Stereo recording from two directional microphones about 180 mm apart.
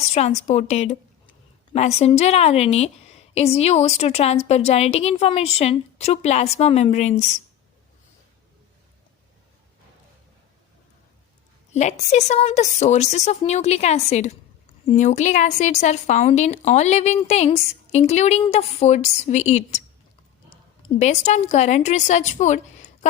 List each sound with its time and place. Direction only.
0.1 s a woman's voice: 40° left (ahead or behind)
11.7 s a woman's voice: 40° left (ahead or behind)
21.0 s a woman's voice: 40° left (ahead or behind)